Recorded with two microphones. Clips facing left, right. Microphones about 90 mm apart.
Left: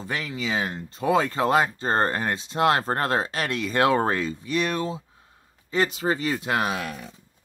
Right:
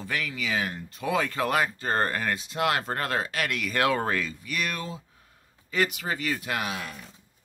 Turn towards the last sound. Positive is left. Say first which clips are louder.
# left 5 dB
turn(degrees=30)  # may be behind; listen again after turning